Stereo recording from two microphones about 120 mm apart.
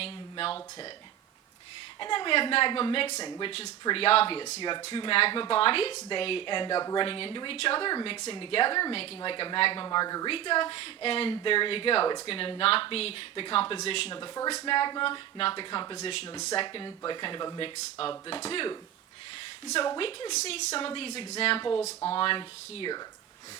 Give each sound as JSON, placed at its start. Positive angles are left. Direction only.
{"t": 0.0, "sound": "a sound", "side_deg": 50}
{"t": 2.0, "sound": "a woman's voice", "side_deg": 45}
{"t": 3.2, "sound": "speech", "side_deg": 30}
{"t": 3.4, "sound": "a woman's voice", "side_deg": 55}
{"t": 9.8, "sound": "speech", "side_deg": 35}
{"t": 10.2, "sound": "a woman's voice", "side_deg": 45}
{"t": 14.2, "sound": "speech", "side_deg": 35}
{"t": 16.0, "sound": "a woman's voice", "side_deg": 50}
{"t": 20.0, "sound": "a woman's voice", "side_deg": 45}